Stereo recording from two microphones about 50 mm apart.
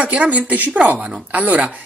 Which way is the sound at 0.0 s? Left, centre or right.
Right.